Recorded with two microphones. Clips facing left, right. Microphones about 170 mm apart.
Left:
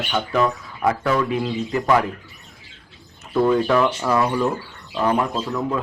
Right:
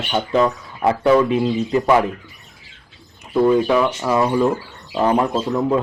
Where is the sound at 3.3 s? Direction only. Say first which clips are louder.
Right 2 dB; 10° right (ahead or behind).